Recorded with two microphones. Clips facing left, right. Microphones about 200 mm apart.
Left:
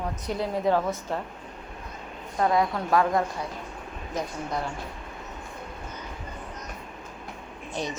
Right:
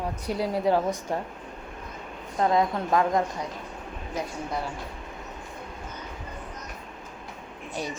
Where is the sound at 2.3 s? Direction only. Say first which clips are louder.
Even; 25° right (ahead or behind).